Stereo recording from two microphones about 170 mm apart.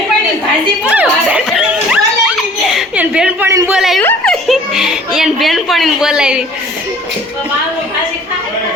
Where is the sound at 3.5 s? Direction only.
15° right (ahead or behind).